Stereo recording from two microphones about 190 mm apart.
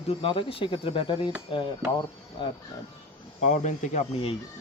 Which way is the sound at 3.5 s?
40° left (ahead or behind).